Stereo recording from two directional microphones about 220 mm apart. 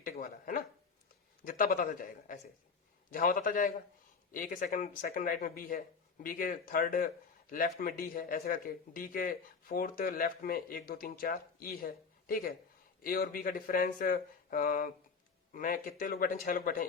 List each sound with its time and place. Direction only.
0.0 s speech: 35° left (ahead or behind)